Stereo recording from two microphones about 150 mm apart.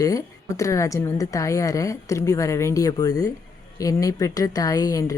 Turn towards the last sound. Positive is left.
turn(degrees=25)  # may be behind; listen again after turning